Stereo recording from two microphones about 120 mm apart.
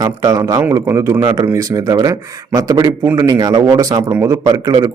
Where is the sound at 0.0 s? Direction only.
30° right (ahead or behind).